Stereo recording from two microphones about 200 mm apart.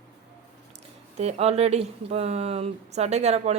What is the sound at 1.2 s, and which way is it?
Speech, 30° right (ahead or behind).